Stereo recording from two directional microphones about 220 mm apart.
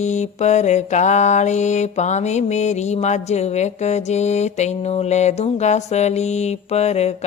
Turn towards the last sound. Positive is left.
turn(degrees=30)  # may be behind; listen again after turning